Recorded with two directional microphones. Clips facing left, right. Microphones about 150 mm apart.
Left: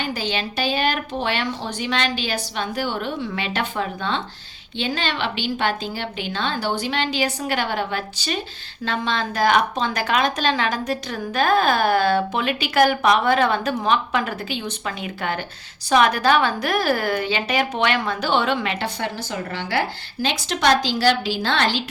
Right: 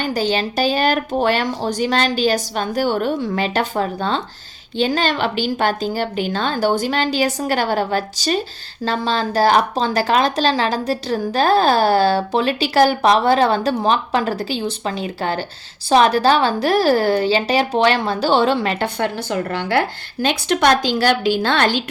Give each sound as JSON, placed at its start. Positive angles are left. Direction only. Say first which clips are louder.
{"t": 0.0, "sound": "a woman's voice", "louder": "right 6 dB", "side_deg": -45}
{"t": 18.9, "sound": "a woman's voice", "louder": "right 6 dB", "side_deg": -55}